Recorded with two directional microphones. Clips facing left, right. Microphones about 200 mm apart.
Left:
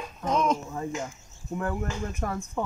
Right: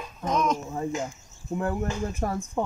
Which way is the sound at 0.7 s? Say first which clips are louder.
Right 3 dB; 20° right (ahead or behind).